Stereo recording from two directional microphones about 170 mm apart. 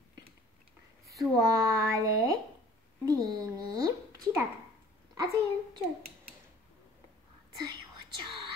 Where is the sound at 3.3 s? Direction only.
20° right (ahead or behind).